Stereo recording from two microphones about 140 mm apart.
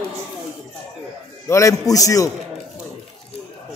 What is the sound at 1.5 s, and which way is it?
Speech, 25° left (ahead or behind).